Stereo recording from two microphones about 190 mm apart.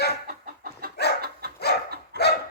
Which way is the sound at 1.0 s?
60° left (ahead or behind).